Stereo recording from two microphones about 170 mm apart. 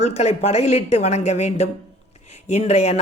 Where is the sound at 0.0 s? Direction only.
40° left (ahead or behind).